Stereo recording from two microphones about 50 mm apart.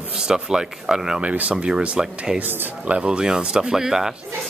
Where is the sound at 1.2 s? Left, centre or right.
Right.